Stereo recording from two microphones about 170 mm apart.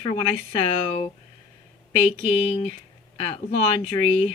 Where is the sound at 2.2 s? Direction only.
30° left (ahead or behind).